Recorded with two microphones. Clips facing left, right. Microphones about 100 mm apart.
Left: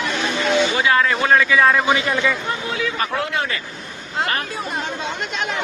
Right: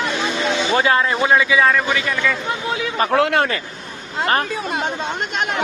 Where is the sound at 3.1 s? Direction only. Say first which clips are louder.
Right 7 dB; 65° right (ahead or behind).